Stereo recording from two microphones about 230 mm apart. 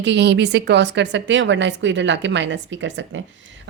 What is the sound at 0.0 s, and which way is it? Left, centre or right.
A woman's voice, right.